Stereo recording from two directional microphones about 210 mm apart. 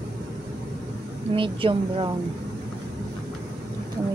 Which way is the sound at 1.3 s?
25° right (ahead or behind).